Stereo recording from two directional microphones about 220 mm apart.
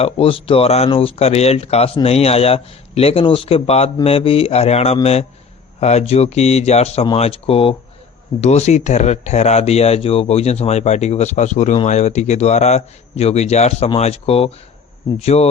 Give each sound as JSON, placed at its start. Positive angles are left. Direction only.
{"t": 0.0, "sound": "speech", "side_deg": 25}